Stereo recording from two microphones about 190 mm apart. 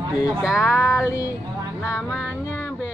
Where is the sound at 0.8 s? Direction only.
15° left (ahead or behind).